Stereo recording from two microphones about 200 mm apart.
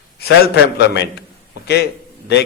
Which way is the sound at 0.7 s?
55° left (ahead or behind).